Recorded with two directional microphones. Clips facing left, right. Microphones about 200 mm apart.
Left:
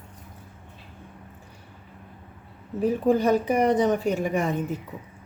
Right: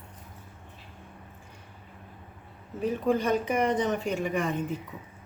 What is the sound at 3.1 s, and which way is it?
A woman's voice, 35° left (ahead or behind).